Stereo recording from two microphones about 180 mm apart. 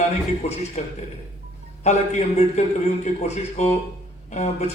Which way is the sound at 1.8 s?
40° left (ahead or behind).